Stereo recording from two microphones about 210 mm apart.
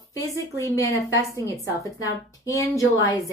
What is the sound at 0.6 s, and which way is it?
A woman's voice, 15° left (ahead or behind).